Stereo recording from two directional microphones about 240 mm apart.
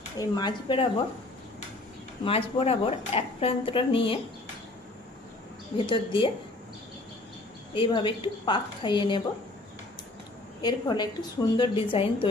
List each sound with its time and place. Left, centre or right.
0.2 s speech: centre
2.2 s a woman's voice: left
5.7 s a woman's voice: centre
7.7 s a woman's voice: left
10.6 s a woman's voice: centre